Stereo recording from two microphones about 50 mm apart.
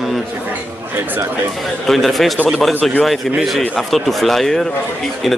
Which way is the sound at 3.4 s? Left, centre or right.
Centre.